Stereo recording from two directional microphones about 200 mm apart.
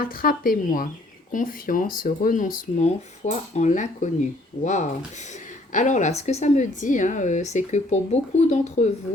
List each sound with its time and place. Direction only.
0.0 s speech: 45° left (ahead or behind)